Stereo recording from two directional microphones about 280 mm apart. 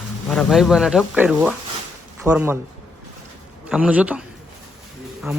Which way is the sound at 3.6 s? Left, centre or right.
Centre.